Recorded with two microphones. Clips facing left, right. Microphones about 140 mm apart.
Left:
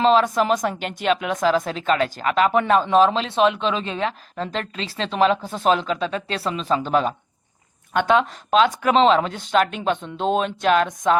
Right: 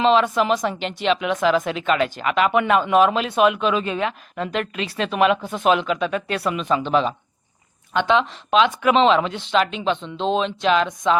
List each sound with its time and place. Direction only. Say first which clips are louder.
0.0 s speech: even; 40° left (ahead or behind)